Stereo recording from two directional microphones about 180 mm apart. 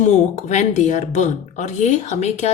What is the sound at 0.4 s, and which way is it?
A woman's voice, 40° left (ahead or behind).